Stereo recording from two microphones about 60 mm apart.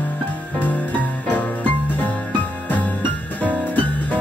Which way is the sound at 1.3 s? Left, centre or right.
Left.